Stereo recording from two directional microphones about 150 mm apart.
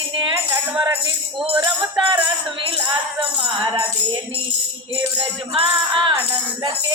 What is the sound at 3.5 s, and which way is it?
Music, 35° right (ahead or behind).